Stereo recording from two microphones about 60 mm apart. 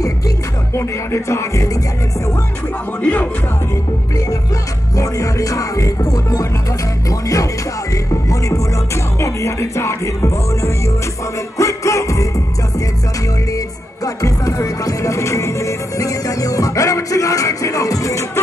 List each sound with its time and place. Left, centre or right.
0.7 s music: left
3.0 s speech: left
4.9 s music: left
14.0 s music: left